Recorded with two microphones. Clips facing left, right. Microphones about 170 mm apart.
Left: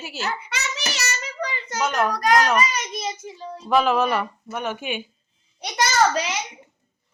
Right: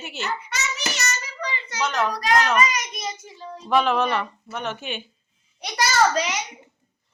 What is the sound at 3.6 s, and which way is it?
Speech, 5° left (ahead or behind).